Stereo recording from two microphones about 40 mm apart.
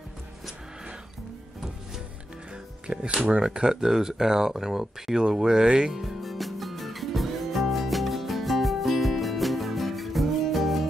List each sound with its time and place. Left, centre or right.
2.5 s music: right
3.4 s speech: centre
5.9 s music: centre